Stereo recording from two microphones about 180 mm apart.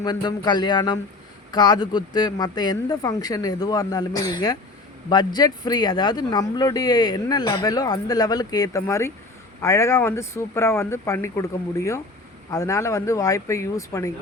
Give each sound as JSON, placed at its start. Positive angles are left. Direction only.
{"t": 0.0, "sound": "speech", "side_deg": 20}